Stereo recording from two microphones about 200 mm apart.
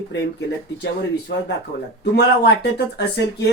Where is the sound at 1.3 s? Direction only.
60° left (ahead or behind).